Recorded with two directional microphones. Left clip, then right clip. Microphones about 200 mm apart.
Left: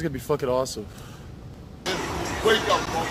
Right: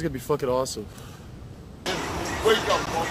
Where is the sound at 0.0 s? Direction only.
Centre (ahead or behind).